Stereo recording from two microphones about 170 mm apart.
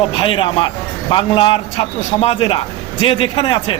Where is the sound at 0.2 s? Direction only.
30° left (ahead or behind).